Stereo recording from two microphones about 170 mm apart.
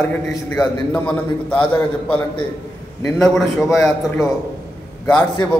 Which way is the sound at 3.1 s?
Centre (ahead or behind).